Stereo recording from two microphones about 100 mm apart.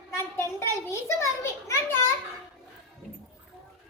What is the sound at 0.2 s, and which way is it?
A child's voice, 25° left (ahead or behind).